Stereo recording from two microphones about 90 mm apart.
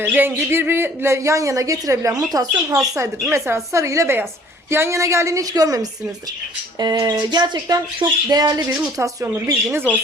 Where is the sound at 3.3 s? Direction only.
30° right (ahead or behind).